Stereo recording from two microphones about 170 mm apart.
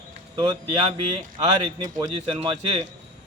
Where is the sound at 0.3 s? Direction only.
30° right (ahead or behind).